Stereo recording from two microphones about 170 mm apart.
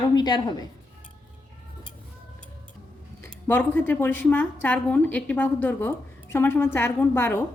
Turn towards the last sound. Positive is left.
turn(degrees=15)  # may be behind; listen again after turning